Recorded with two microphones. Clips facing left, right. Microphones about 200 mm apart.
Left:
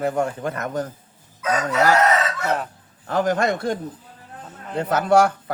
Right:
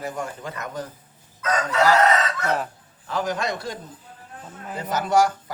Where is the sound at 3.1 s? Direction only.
50° left (ahead or behind).